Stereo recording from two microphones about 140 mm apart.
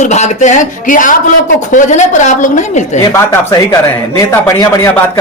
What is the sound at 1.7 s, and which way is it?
A woman's voice, 60° left (ahead or behind).